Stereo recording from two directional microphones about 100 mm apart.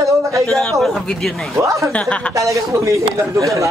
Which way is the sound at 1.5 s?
30° right (ahead or behind).